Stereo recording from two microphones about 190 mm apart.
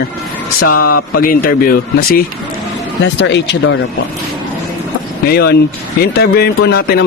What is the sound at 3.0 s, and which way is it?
Speech, 70° left (ahead or behind).